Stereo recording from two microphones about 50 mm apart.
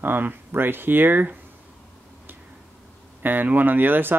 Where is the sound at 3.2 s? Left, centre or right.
Right.